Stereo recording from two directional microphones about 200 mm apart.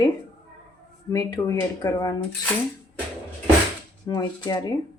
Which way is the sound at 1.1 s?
15° left (ahead or behind).